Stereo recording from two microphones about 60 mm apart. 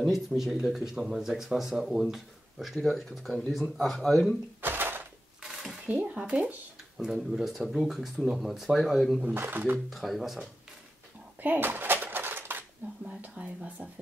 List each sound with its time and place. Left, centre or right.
0.0 s speech: centre
4.6 s a sound: right
5.4 s a sound: centre
6.1 s speech: centre
7.0 s speech: centre
9.2 s speech: right
9.8 s speech: centre
11.4 s a sound: right
13.2 s speech: right